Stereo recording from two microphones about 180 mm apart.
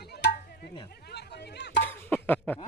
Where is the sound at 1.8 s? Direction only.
10° left (ahead or behind).